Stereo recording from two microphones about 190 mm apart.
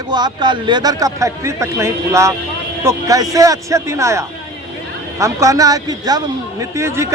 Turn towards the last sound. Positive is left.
turn(degrees=-15)  # may be behind; listen again after turning